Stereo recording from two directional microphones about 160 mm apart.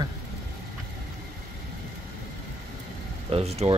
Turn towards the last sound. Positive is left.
turn(degrees=-40)  # may be behind; listen again after turning